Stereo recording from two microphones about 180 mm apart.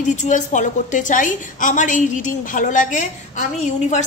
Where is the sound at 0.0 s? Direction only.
45° left (ahead or behind).